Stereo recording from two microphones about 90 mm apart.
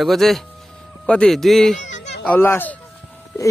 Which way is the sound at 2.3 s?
25° left (ahead or behind).